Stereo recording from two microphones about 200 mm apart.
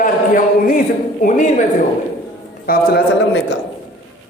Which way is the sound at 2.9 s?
55° left (ahead or behind).